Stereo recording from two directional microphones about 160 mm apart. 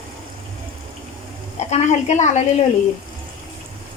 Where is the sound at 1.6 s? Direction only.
45° left (ahead or behind).